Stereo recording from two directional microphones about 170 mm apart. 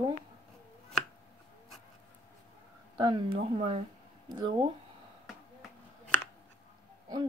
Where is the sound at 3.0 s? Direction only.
25° right (ahead or behind).